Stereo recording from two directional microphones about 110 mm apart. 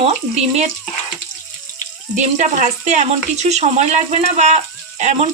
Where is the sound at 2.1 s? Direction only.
90° right.